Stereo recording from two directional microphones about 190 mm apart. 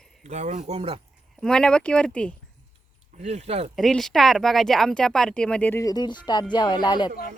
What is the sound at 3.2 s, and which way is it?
Speech, 35° right (ahead or behind).